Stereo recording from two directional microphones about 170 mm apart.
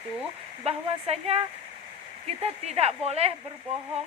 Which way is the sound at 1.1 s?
35° right (ahead or behind).